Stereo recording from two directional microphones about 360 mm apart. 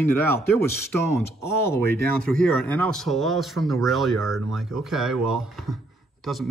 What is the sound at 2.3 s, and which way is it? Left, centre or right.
Speech, centre.